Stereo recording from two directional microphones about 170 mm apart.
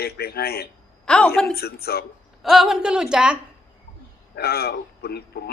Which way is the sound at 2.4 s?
Centre (ahead or behind).